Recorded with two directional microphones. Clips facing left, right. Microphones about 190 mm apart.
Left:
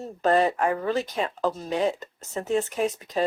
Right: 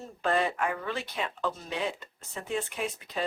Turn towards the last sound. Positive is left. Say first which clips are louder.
# left 8 dB
turn(degrees=40)  # may be behind; listen again after turning